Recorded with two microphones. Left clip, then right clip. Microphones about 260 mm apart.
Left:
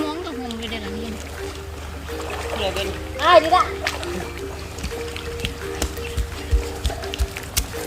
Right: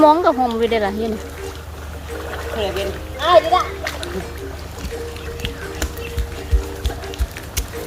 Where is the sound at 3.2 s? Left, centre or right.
Left.